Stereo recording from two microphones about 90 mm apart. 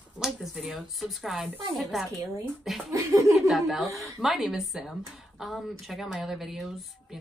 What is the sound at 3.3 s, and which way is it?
Speech, centre (ahead or behind).